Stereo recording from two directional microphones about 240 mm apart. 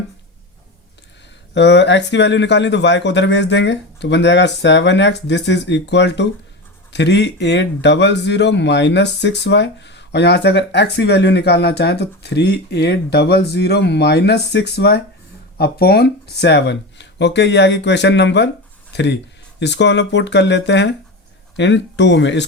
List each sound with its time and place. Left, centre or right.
1.5 s speech: left